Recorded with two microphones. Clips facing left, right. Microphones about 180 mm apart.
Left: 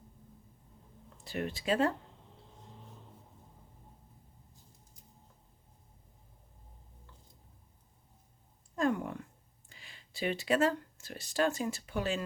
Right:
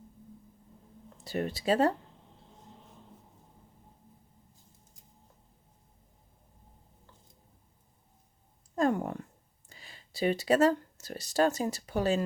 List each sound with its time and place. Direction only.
1.2 s speech: 40° right (ahead or behind)
8.7 s a sound: 40° right (ahead or behind)
9.6 s speech: 35° right (ahead or behind)